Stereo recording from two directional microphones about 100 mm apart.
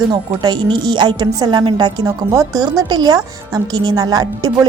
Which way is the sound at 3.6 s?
40° right (ahead or behind).